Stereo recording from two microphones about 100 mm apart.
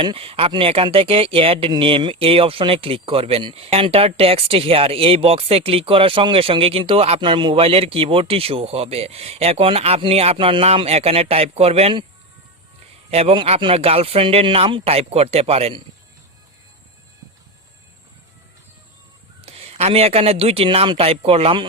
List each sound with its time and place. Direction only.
0.0 s speech: 65° right (ahead or behind); by 7.2 s 85° right
7.2 s speech: 55° right (ahead or behind); by 11.9 s 90° right
13.1 s a man's voice: 90° right
13.3 s speech: 60° right (ahead or behind); by 15.7 s 90° right
19.5 s speech: 90° right; by 21.7 s 75° right (ahead or behind)